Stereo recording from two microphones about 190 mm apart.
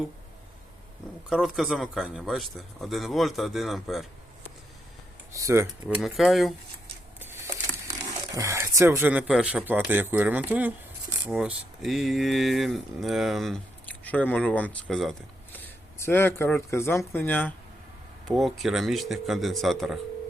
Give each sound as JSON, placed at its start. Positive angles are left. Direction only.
{"t": 1.3, "sound": "speech", "side_deg": 0}
{"t": 5.3, "sound": "speech", "side_deg": -15}
{"t": 5.6, "sound": "speech", "side_deg": 0}
{"t": 7.2, "sound": "a sound", "side_deg": -10}
{"t": 8.3, "sound": "speech", "side_deg": -15}